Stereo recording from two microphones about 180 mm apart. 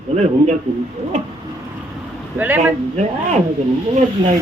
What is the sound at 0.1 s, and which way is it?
Speech, 40° right (ahead or behind).